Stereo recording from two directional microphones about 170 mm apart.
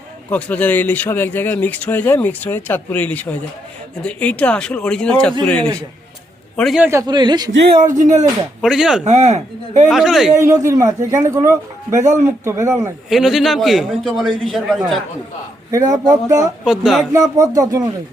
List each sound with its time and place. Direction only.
0.3 s a man's voice: 10° left (ahead or behind)
6.6 s a man's voice: centre (ahead or behind)
7.1 s music: 25° right (ahead or behind)
7.9 s speech: 45° right (ahead or behind)
8.6 s a man's voice: centre (ahead or behind)
9.0 s speech: 40° right (ahead or behind)
9.9 s a man's voice: centre (ahead or behind)
10.4 s speech: 15° right (ahead or behind)
13.1 s a man's voice: centre (ahead or behind)
15.7 s music: 20° right (ahead or behind)
16.6 s a man's voice: centre (ahead or behind)
17.1 s music: 20° right (ahead or behind)